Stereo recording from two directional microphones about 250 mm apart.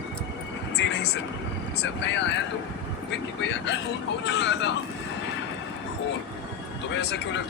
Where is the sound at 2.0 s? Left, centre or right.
Left.